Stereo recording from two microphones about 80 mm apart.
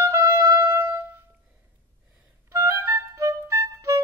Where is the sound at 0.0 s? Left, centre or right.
Right.